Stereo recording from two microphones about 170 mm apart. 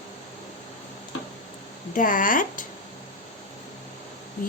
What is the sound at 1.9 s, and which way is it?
Speech, 50° left (ahead or behind).